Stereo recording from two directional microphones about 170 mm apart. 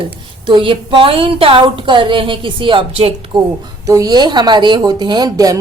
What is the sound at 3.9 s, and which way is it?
Speech, 20° right (ahead or behind).